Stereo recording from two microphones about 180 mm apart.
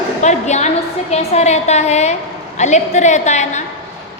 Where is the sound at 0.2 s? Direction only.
40° left (ahead or behind).